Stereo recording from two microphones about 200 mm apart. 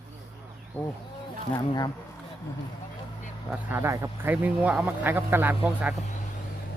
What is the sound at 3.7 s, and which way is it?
Speech, 15° right (ahead or behind).